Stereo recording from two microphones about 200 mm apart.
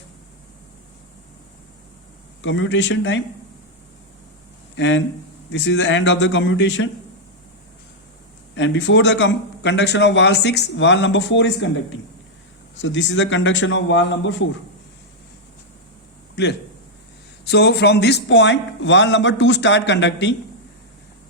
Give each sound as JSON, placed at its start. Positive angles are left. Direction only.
{"t": 2.4, "sound": "speech", "side_deg": 70}
{"t": 4.7, "sound": "a man's voice", "side_deg": 65}
{"t": 8.5, "sound": "a man's voice", "side_deg": 65}
{"t": 16.3, "sound": "speech", "side_deg": 60}